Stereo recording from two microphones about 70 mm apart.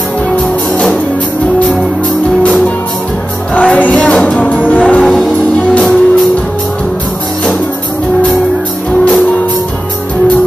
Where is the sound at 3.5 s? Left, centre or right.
Left.